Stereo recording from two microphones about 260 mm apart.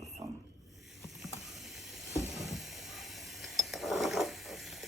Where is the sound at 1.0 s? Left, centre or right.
Centre.